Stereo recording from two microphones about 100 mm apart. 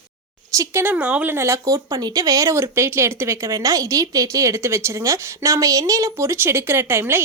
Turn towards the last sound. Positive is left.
turn(degrees=-25)  # may be behind; listen again after turning